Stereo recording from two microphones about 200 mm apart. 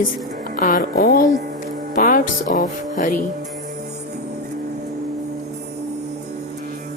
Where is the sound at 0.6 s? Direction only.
45° left (ahead or behind).